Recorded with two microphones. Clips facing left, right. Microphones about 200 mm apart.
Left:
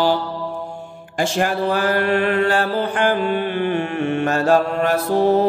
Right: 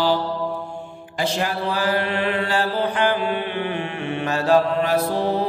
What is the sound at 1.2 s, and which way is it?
Mantra, 50° left (ahead or behind).